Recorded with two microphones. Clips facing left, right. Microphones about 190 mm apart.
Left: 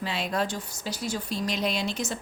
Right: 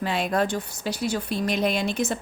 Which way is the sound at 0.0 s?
50° right (ahead or behind).